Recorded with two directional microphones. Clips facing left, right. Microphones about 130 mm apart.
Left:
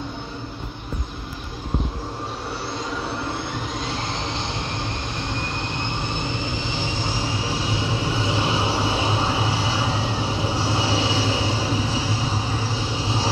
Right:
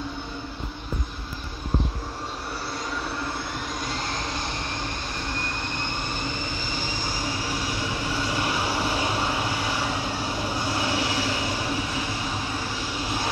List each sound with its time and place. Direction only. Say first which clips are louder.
7.4 s train: left 3 dB; 25° left (ahead or behind)
10.6 s vehicle: left 3 dB; 25° left (ahead or behind)
13.0 s vehicle: left 3 dB; 25° left (ahead or behind)